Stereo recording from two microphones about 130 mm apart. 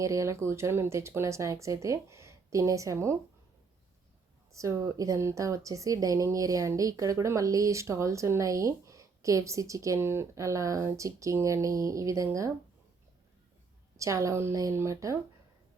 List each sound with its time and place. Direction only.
0.0 s speech: 25° right (ahead or behind)
4.5 s speech: 25° right (ahead or behind)
13.9 s speech: 25° right (ahead or behind)